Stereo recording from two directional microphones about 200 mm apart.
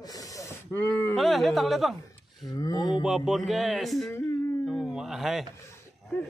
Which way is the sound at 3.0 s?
Centre (ahead or behind).